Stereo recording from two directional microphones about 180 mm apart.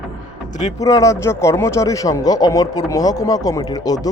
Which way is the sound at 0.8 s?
20° left (ahead or behind).